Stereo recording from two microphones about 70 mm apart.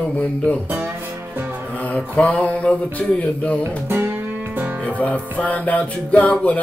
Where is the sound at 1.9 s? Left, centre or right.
Centre.